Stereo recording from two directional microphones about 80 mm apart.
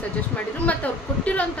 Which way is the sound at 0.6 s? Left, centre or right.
Centre.